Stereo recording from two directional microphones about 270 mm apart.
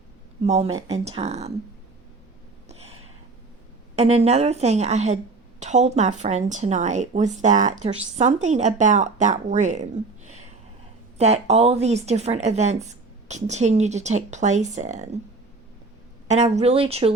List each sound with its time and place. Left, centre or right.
0.4 s speech: right
0.7 s speech: centre
1.0 s speech: right
3.9 s speech: right
16.3 s speech: right